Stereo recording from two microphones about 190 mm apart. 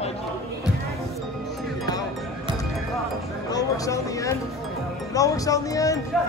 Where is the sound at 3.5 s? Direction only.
15° left (ahead or behind).